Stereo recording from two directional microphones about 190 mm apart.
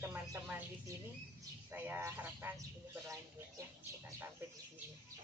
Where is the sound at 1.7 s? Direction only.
10° right (ahead or behind).